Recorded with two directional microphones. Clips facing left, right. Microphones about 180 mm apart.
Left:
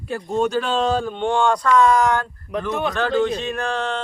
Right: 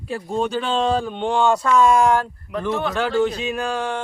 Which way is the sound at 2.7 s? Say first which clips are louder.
Right 1 dB; 15° left (ahead or behind).